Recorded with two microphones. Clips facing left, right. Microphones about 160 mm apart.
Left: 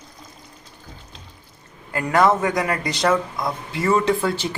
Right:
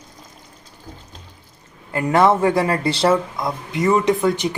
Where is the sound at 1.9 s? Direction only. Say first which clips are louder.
Right 2 dB; 25° right (ahead or behind).